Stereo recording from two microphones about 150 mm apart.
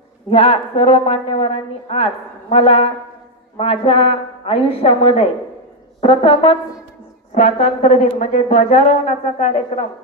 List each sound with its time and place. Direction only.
0.3 s a woman's voice: 40° left (ahead or behind)
7.3 s speech: 50° left (ahead or behind)